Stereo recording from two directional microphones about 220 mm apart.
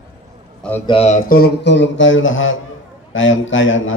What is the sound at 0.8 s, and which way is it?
A man's voice, 25° left (ahead or behind).